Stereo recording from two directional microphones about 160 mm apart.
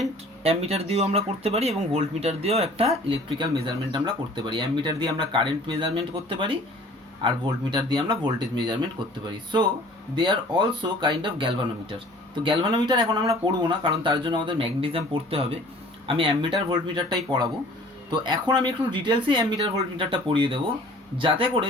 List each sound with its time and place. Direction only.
0.4 s speech: 40° right (ahead or behind)
10.2 s speech: 30° right (ahead or behind)